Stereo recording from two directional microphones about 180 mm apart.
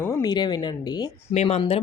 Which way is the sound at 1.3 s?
35° left (ahead or behind).